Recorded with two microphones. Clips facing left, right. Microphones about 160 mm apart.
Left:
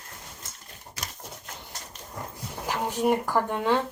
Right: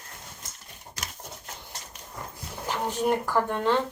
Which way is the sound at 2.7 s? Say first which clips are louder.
Left 1 dB; 5° left (ahead or behind).